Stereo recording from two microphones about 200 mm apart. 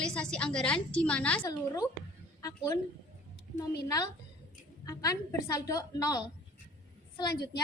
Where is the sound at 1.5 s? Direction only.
15° left (ahead or behind).